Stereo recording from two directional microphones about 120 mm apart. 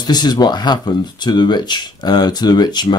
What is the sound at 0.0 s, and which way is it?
Speech, 35° left (ahead or behind).